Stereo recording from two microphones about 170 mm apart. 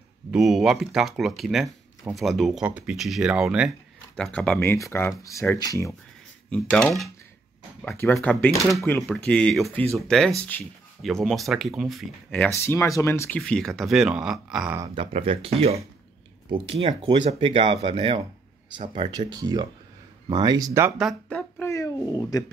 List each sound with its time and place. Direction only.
0.3 s speech: centre (ahead or behind); by 5.9 s 20° left (ahead or behind)
6.5 s speech: 5° left (ahead or behind)
12.5 s speech: 15° left (ahead or behind); by 14.8 s 5° right (ahead or behind)
15.0 s speech: 35° right (ahead or behind)
21.0 s a sound: centre (ahead or behind); by 22.4 s 20° left (ahead or behind)